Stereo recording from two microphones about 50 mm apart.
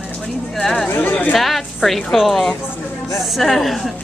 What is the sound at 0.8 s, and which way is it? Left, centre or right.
Speech, left.